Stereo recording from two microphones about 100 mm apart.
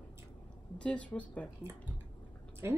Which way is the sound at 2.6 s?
25° right (ahead or behind).